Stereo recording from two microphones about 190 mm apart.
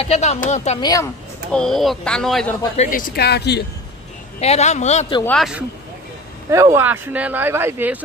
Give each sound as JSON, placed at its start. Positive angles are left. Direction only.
{"t": 0.0, "sound": "speech", "side_deg": 35}
{"t": 0.7, "sound": "speech", "side_deg": 20}
{"t": 1.5, "sound": "speech", "side_deg": 5}
{"t": 2.8, "sound": "speech", "side_deg": 45}
{"t": 4.4, "sound": "speech", "side_deg": 35}
{"t": 5.2, "sound": "speech", "side_deg": 0}
{"t": 6.5, "sound": "speech", "side_deg": -15}